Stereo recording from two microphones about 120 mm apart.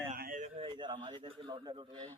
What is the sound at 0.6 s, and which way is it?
Speech, 45° right (ahead or behind).